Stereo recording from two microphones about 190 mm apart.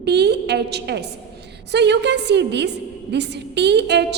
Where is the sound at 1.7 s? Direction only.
65° right (ahead or behind).